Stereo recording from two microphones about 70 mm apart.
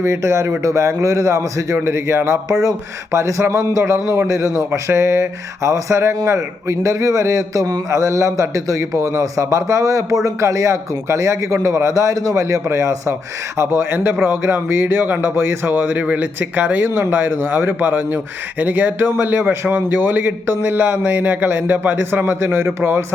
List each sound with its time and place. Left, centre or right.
0.0 s a man's voice: right
13.6 s a man's voice: right